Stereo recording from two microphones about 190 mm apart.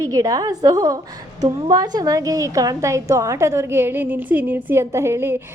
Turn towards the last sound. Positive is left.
turn(degrees=-10)  # may be behind; listen again after turning